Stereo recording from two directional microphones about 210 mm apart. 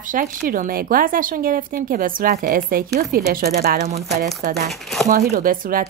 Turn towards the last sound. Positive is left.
turn(degrees=-40)  # may be behind; listen again after turning